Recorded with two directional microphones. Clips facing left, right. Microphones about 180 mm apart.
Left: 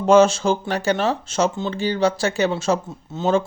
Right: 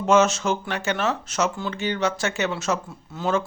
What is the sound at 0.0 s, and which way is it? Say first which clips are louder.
A man's voice: left 5 dB; 35° left (ahead or behind).